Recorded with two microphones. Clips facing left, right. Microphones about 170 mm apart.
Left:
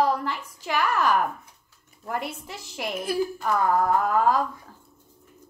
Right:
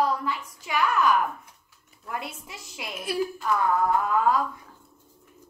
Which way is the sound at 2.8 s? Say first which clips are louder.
Left 3 dB; 45° left (ahead or behind).